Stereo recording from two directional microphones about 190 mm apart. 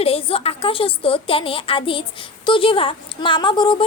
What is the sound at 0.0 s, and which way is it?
A woman's voice, 30° left (ahead or behind).